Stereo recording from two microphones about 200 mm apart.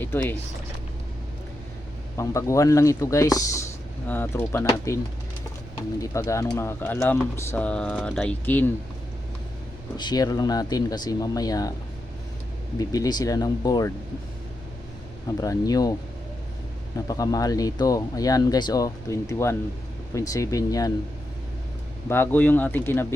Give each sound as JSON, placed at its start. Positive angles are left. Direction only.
{"t": 0.0, "sound": "speech", "side_deg": 10}
{"t": 2.1, "sound": "speech", "side_deg": 15}
{"t": 6.0, "sound": "speech", "side_deg": 15}
{"t": 10.0, "sound": "speech", "side_deg": 20}
{"t": 12.8, "sound": "speech", "side_deg": 20}
{"t": 15.4, "sound": "speech", "side_deg": 20}
{"t": 17.1, "sound": "speech", "side_deg": 15}
{"t": 22.1, "sound": "speech", "side_deg": 10}